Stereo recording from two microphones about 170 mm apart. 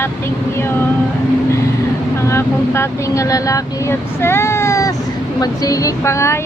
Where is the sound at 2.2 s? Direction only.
15° left (ahead or behind).